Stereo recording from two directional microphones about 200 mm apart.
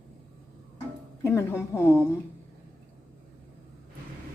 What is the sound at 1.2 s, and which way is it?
Speech, 15° left (ahead or behind).